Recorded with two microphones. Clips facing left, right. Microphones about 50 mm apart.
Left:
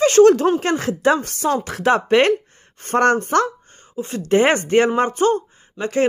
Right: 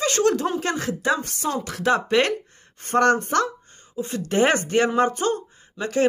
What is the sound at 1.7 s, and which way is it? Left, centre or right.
Speech, left.